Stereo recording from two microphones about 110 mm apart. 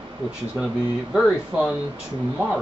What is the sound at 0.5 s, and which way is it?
Speech, 5° right (ahead or behind).